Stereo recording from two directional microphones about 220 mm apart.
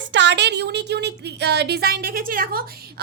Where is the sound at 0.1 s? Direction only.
55° right (ahead or behind).